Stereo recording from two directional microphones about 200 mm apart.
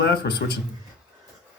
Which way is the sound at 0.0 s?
55° left (ahead or behind).